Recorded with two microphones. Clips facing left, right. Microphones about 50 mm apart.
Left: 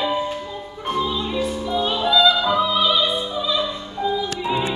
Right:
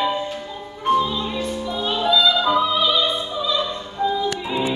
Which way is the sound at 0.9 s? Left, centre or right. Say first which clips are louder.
Right 2 dB; centre.